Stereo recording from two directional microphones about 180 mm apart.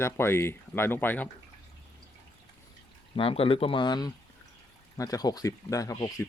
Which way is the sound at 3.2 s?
30° left (ahead or behind).